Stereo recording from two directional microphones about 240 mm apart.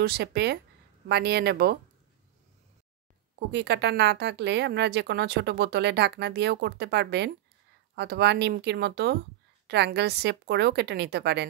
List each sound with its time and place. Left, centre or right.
0.0 s speech: right
3.5 s speech: right